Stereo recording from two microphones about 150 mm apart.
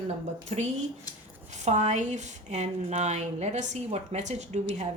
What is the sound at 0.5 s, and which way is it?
Speech, 45° right (ahead or behind).